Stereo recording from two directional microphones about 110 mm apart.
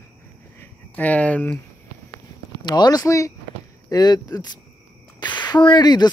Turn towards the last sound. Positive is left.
turn(degrees=40)  # may be behind; listen again after turning